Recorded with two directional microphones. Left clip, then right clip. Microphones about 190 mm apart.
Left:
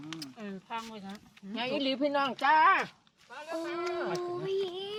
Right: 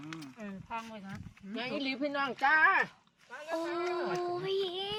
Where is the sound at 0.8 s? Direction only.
55° left (ahead or behind).